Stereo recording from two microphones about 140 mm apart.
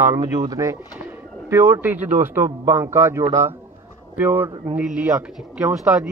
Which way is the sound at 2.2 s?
15° right (ahead or behind).